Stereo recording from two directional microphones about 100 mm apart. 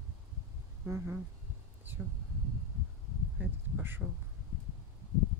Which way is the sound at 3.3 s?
15° right (ahead or behind).